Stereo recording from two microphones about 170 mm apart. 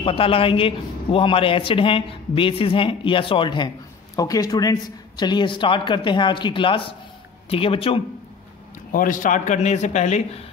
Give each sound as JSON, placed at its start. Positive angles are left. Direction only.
{"t": 0.0, "sound": "a woman's voice", "side_deg": 35}
{"t": 8.9, "sound": "a man's voice", "side_deg": 50}